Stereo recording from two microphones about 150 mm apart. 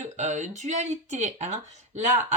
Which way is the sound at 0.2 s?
50° right (ahead or behind).